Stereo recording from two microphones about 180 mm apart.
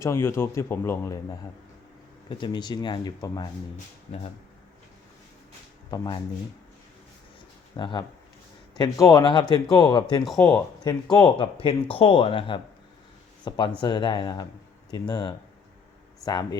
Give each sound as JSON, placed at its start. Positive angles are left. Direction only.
{"t": 0.0, "sound": "a man's voice", "side_deg": 15}
{"t": 5.9, "sound": "speech", "side_deg": 25}
{"t": 7.8, "sound": "speech", "side_deg": 25}
{"t": 10.3, "sound": "a man's voice", "side_deg": 15}
{"t": 11.1, "sound": "speech", "side_deg": 25}